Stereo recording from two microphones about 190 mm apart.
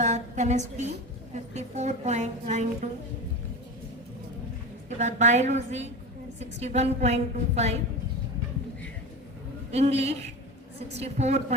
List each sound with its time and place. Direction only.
0.0 s a sound: 40° right (ahead or behind)
1.5 s a woman's voice: 35° right (ahead or behind)
4.9 s a woman's voice: 40° right (ahead or behind)
9.7 s a woman's voice: 35° right (ahead or behind)